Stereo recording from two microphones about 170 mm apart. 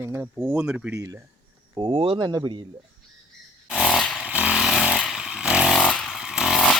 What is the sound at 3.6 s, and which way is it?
Vehicle, 5° right (ahead or behind).